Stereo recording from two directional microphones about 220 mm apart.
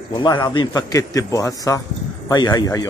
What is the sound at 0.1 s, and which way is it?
A man's voice, 20° left (ahead or behind).